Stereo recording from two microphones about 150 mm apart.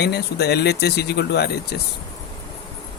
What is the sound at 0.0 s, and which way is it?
Speech, 90° left.